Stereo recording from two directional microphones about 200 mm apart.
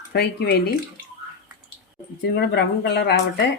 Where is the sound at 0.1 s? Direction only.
55° left (ahead or behind).